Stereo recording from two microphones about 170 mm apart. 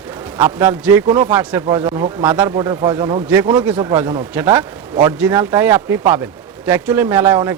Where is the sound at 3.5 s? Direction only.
10° right (ahead or behind).